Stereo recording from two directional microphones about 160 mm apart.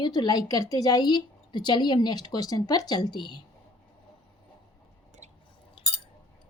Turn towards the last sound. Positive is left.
turn(degrees=35)  # may be behind; listen again after turning